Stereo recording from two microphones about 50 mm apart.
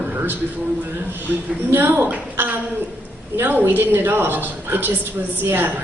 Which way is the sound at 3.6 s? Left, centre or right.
Right.